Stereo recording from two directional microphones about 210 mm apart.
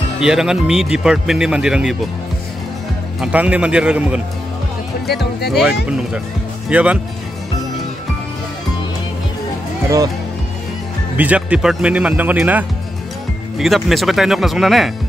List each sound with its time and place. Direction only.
0.2 s speech: 5° right (ahead or behind)
3.2 s speech: 5° right (ahead or behind)
5.0 s speech: 50° left (ahead or behind)
5.9 s speech: 5° right (ahead or behind)
11.1 s speech: 5° right (ahead or behind)